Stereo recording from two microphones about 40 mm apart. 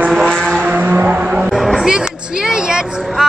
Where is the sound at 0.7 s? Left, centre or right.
Right.